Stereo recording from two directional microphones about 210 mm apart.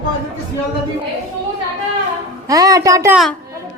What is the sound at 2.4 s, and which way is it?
Speech, 15° right (ahead or behind).